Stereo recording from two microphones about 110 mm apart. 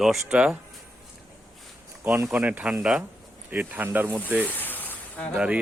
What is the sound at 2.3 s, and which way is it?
Speech, 10° right (ahead or behind).